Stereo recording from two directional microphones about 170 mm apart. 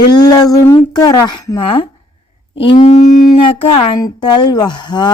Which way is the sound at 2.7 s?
40° left (ahead or behind).